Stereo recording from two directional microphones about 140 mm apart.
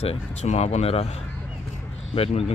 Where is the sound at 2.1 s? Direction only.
45° left (ahead or behind).